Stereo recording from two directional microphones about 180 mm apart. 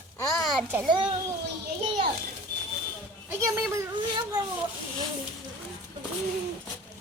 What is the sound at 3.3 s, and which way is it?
Speech, 15° right (ahead or behind).